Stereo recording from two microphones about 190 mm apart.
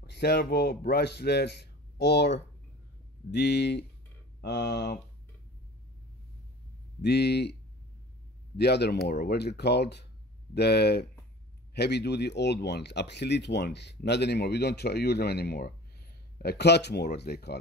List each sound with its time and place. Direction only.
0.0 s speech: 60° left (ahead or behind)
7.0 s speech: 60° left (ahead or behind)
8.5 s speech: 60° left (ahead or behind)